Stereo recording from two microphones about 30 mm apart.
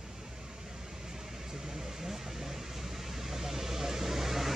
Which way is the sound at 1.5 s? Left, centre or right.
Centre.